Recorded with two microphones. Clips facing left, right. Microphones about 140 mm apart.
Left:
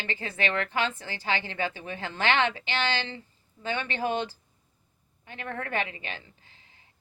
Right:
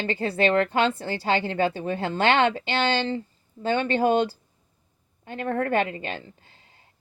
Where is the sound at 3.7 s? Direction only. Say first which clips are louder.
Right 8 dB; 50° right (ahead or behind).